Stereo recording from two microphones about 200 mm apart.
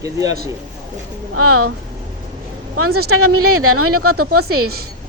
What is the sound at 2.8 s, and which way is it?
Speech, 90° right.